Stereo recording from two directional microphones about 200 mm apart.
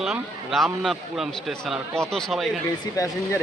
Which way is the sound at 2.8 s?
15° left (ahead or behind).